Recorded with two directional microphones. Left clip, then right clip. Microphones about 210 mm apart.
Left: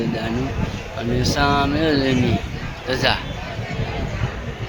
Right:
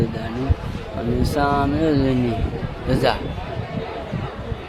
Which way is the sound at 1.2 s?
Centre (ahead or behind).